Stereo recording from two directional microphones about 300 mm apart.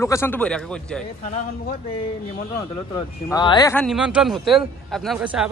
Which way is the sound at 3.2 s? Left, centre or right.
Centre.